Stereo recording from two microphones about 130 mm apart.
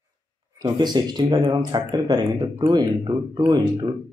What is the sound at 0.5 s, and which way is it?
A man's voice, 35° right (ahead or behind).